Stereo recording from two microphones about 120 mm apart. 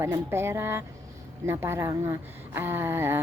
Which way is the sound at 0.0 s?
20° right (ahead or behind).